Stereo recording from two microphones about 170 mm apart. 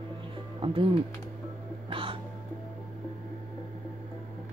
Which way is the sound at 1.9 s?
30° right (ahead or behind).